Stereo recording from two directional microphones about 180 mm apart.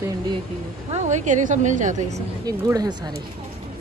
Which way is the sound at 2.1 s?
20° right (ahead or behind).